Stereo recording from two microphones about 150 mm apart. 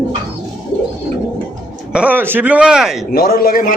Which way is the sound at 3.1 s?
90° left.